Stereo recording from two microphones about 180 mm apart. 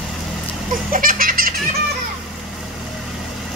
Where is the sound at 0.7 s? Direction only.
50° right (ahead or behind).